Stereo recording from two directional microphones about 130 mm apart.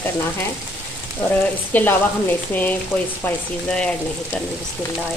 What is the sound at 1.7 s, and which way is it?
Frying, 15° left (ahead or behind).